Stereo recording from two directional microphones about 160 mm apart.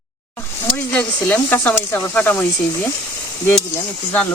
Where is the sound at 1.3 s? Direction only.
10° left (ahead or behind).